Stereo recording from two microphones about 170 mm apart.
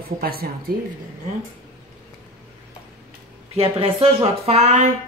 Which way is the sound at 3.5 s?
35° right (ahead or behind).